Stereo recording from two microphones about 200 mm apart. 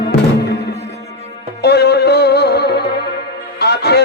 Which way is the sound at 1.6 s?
55° left (ahead or behind).